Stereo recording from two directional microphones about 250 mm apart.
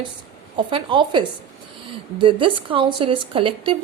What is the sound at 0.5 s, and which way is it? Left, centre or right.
A woman's voice, centre.